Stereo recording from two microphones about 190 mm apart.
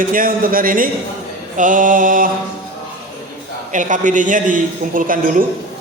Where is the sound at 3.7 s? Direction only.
40° right (ahead or behind).